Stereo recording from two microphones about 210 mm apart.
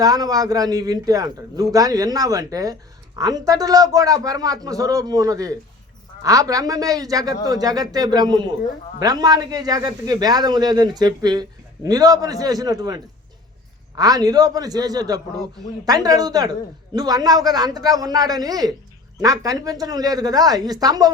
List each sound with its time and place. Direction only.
0.0 s a woman's voice: 15° right (ahead or behind)